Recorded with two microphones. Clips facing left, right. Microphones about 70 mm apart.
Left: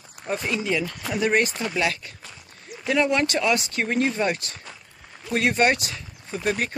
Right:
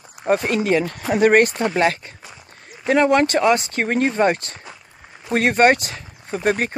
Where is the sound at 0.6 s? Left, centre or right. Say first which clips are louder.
Right 7 dB; right.